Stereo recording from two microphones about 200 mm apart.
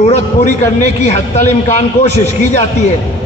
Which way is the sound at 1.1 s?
35° left (ahead or behind).